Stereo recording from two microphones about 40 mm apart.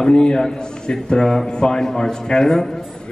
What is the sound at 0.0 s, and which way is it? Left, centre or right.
A man's voice, centre.